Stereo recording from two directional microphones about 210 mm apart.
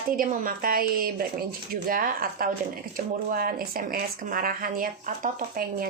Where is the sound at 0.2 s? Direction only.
40° right (ahead or behind).